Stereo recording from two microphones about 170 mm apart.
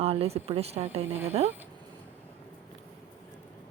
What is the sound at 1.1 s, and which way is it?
Speech, 15° right (ahead or behind).